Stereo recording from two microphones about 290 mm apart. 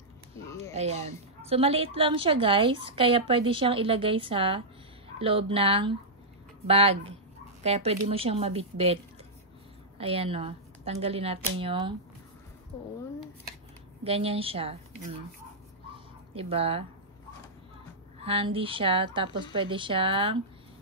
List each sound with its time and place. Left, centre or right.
0.5 s speech: centre
0.7 s a woman's voice: right
14.0 s a woman's voice: centre
15.9 s fowl: centre
18.2 s a woman's voice: centre